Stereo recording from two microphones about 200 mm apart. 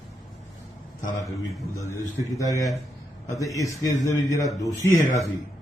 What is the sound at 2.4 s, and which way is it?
A man's voice, 15° left (ahead or behind).